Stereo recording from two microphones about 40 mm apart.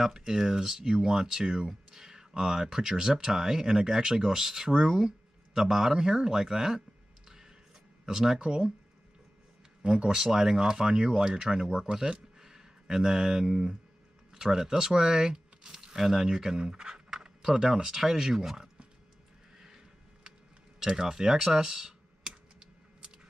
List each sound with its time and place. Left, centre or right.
0.0 s speech: centre
7.2 s music: centre
8.0 s speech: centre
9.8 s speech: centre
20.8 s typing: centre